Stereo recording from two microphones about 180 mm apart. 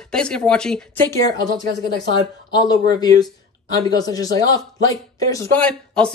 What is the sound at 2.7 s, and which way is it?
Speech, 20° left (ahead or behind).